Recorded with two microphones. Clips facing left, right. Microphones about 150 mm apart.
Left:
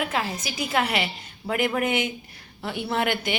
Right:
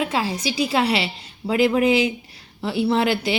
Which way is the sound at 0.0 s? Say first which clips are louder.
Right 4 dB; 30° right (ahead or behind).